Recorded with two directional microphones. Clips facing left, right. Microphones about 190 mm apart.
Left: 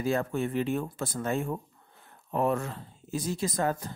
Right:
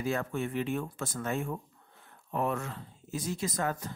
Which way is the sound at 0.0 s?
35° left (ahead or behind).